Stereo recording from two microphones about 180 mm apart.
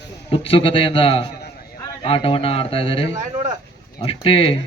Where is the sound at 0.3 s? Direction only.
30° left (ahead or behind).